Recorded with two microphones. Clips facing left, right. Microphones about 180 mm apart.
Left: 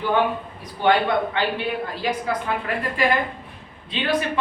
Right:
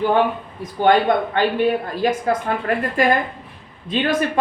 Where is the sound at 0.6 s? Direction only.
45° right (ahead or behind).